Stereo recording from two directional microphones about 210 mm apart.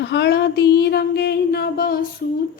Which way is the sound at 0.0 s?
55° left (ahead or behind).